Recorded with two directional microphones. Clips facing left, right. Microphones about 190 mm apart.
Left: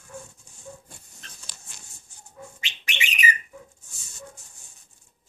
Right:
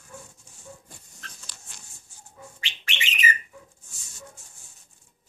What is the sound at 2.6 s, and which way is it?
Bird, 15° left (ahead or behind).